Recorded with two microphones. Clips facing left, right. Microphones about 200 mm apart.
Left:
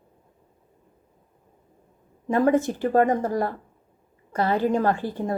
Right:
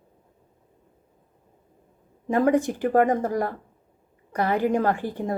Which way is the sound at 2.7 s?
20° left (ahead or behind).